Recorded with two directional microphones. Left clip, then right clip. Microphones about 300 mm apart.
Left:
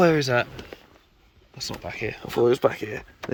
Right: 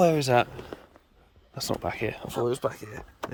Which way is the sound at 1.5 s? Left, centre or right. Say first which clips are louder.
Right 2 dB; centre.